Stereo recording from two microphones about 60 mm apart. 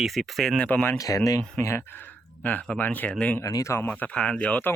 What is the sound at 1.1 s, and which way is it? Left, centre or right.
Speech, left.